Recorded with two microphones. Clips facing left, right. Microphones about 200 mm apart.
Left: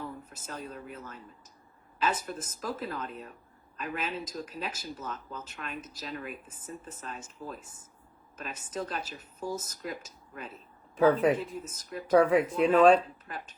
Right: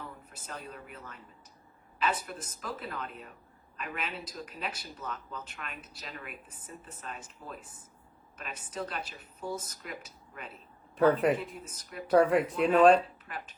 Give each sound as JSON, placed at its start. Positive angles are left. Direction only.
{"t": 0.4, "sound": "a woman's voice", "side_deg": 40}
{"t": 10.9, "sound": "speech", "side_deg": 0}
{"t": 11.3, "sound": "a woman's voice", "side_deg": 40}
{"t": 12.1, "sound": "speech", "side_deg": 0}
{"t": 13.3, "sound": "speech", "side_deg": 35}